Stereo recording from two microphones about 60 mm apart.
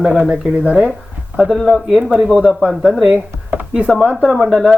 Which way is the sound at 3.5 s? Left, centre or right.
Right.